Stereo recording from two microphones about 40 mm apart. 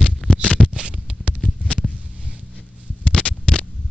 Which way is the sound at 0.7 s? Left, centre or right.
Right.